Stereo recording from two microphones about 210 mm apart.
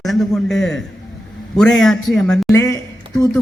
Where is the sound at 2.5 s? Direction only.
15° left (ahead or behind).